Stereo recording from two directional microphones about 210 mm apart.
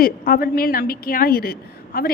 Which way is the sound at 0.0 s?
45° left (ahead or behind).